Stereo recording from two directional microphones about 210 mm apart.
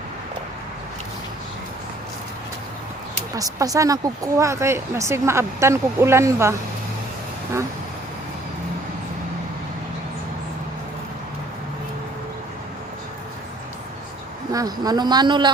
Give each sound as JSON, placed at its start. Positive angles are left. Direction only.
{"t": 3.3, "sound": "speech", "side_deg": -15}
{"t": 14.5, "sound": "a man's voice", "side_deg": -15}